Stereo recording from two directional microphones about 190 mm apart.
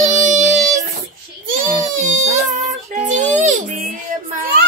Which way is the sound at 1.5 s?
40° right (ahead or behind).